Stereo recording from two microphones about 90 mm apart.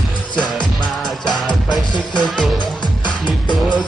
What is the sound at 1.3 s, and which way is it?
Music, centre (ahead or behind).